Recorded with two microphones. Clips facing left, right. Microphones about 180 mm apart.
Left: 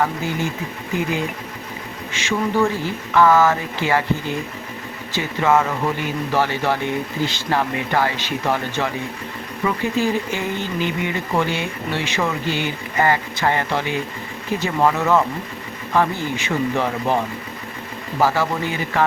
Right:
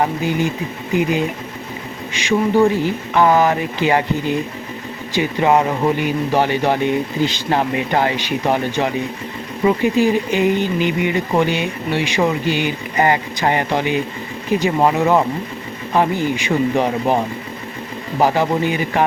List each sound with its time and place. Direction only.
0.0 s speech: 15° right (ahead or behind)
2.1 s speech: 15° right (ahead or behind)
18.2 s speech: 20° right (ahead or behind)